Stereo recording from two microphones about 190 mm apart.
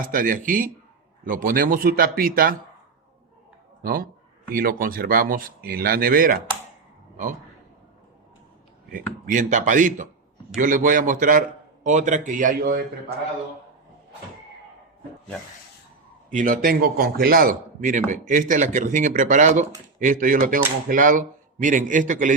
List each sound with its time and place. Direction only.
0.0 s speech: 45° right (ahead or behind)
4.5 s speech: 50° right (ahead or behind)
8.9 s speech: 45° right (ahead or behind)
16.3 s speech: 45° right (ahead or behind)